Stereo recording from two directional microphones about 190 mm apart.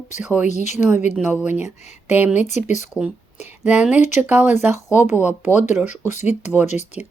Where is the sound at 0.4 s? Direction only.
40° left (ahead or behind).